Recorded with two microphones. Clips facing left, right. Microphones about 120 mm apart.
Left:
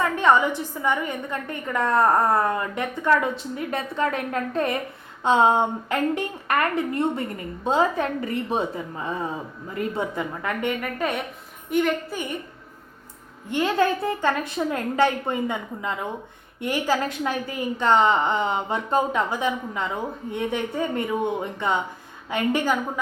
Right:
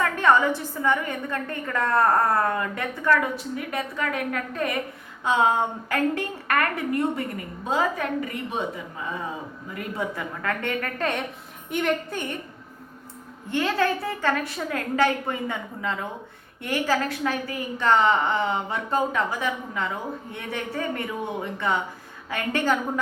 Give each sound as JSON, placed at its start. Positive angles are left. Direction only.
{"t": 0.0, "sound": "a woman's voice", "side_deg": 20}
{"t": 13.5, "sound": "a woman's voice", "side_deg": 15}